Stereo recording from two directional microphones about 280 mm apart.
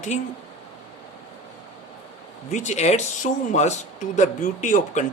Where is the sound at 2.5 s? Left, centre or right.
Left.